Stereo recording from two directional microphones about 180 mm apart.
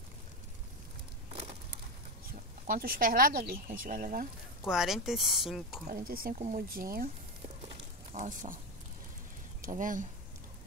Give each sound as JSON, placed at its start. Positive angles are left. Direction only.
{"t": 2.3, "sound": "speech", "side_deg": -50}
{"t": 4.6, "sound": "speech", "side_deg": 0}
{"t": 5.9, "sound": "speech", "side_deg": -55}
{"t": 8.1, "sound": "speech", "side_deg": -40}
{"t": 9.6, "sound": "speech", "side_deg": -45}